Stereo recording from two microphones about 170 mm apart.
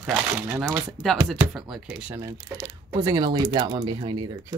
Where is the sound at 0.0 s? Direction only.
5° right (ahead or behind).